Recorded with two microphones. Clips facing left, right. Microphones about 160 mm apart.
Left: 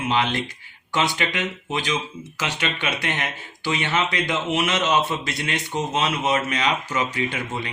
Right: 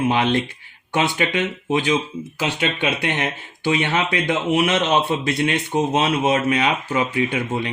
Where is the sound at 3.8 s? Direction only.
60° right (ahead or behind).